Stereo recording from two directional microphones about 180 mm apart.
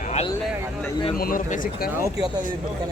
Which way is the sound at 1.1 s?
55° left (ahead or behind).